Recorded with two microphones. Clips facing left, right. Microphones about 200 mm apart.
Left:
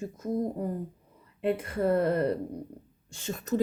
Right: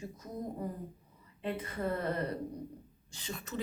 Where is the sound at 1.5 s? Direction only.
50° left (ahead or behind).